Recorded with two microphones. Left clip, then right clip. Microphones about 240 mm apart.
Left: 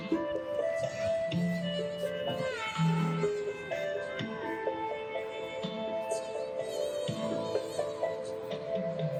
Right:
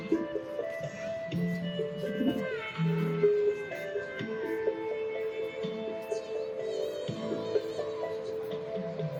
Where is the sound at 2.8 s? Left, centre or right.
Left.